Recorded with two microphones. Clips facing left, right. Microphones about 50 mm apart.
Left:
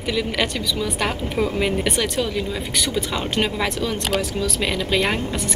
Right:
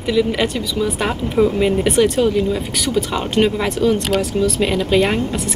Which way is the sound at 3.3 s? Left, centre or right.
Centre.